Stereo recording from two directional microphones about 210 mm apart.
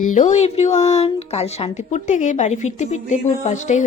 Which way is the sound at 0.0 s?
35° left (ahead or behind).